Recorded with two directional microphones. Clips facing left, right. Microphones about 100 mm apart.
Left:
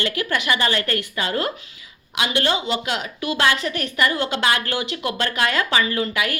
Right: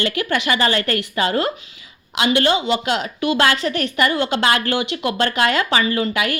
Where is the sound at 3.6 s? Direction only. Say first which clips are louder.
Right 4 dB; 40° right (ahead or behind).